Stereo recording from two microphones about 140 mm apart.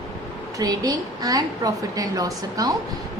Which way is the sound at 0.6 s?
25° right (ahead or behind).